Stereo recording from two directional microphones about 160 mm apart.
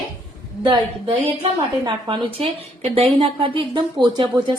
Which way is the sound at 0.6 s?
25° right (ahead or behind).